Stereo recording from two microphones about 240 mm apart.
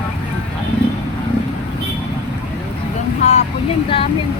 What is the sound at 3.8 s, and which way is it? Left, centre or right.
Vehicle, left.